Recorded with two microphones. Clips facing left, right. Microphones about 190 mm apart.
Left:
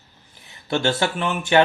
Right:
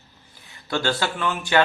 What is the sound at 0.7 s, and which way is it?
Speech, 20° left (ahead or behind).